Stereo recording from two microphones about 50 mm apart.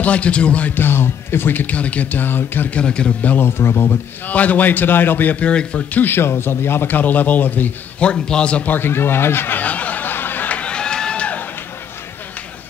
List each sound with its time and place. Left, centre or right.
0.0 s speech: left
0.7 s speech: left
2.7 s speech: centre
3.3 s speech: left
4.3 s speech: left
5.3 s speech: left
5.9 s speech: left
8.0 s speech: centre
8.6 s speech: left
9.6 s snicker: left
10.6 s a sound: centre